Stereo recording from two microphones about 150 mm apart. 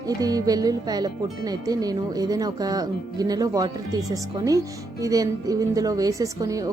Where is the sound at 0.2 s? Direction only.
25° right (ahead or behind).